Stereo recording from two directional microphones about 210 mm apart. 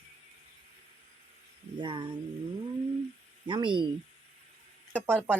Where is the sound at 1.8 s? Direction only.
20° right (ahead or behind).